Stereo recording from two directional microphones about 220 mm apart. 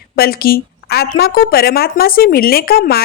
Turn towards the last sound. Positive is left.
turn(degrees=45)  # may be behind; listen again after turning